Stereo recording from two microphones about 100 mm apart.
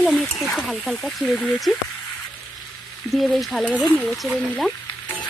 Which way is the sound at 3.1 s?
Centre (ahead or behind).